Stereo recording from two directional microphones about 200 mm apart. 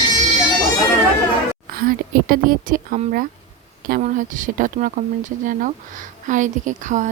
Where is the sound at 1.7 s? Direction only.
45° right (ahead or behind).